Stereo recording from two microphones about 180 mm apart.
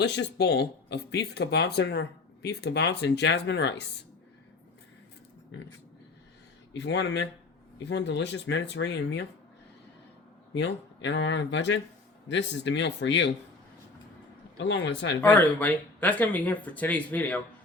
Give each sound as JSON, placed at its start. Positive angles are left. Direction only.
{"t": 0.0, "sound": "speech", "side_deg": 70}
{"t": 6.7, "sound": "speech", "side_deg": 75}
{"t": 10.5, "sound": "speech", "side_deg": 75}
{"t": 14.6, "sound": "speech", "side_deg": 80}
{"t": 15.2, "sound": "speech", "side_deg": 10}